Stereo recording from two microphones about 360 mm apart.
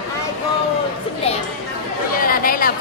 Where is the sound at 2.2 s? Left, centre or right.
Left.